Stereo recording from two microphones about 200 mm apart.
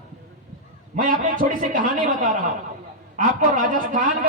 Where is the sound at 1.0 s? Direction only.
40° right (ahead or behind).